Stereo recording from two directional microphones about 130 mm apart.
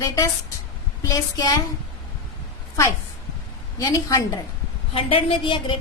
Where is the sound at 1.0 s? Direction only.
25° left (ahead or behind).